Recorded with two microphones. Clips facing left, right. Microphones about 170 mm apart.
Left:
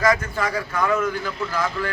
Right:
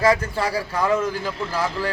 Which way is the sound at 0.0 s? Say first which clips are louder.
Right 1 dB; 30° right (ahead or behind).